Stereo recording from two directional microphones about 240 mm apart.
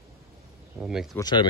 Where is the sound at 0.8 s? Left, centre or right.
Centre.